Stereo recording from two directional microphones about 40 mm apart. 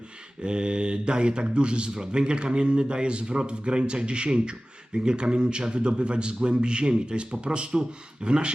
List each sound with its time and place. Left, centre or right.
0.4 s speech: right